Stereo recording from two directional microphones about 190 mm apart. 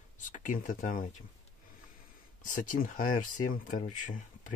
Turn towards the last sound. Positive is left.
turn(degrees=40)  # may be behind; listen again after turning